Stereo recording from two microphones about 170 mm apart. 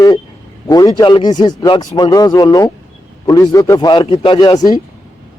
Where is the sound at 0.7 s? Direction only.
20° left (ahead or behind).